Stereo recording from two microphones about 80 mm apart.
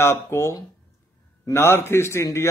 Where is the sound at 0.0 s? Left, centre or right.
Left.